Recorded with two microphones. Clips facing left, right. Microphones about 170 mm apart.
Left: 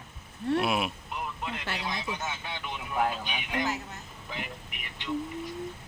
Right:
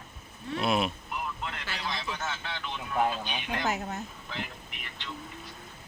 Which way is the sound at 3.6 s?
50° right (ahead or behind).